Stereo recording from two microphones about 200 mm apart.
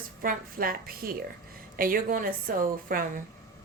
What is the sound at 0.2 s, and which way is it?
A woman's voice, 45° right (ahead or behind).